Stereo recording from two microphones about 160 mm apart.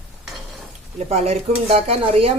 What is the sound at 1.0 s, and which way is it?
Speech, 45° right (ahead or behind).